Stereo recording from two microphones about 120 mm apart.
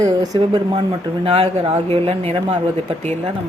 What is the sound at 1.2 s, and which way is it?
Speech, 55° right (ahead or behind).